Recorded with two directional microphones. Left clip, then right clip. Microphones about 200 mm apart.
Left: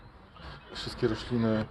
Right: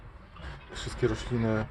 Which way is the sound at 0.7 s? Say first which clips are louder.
Left 1 dB; 40° left (ahead or behind).